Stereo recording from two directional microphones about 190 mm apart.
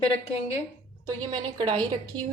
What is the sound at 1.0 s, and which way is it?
Speech, 20° right (ahead or behind).